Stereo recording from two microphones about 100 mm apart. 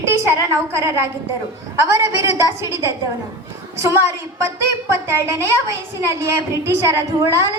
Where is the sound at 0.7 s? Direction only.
30° right (ahead or behind).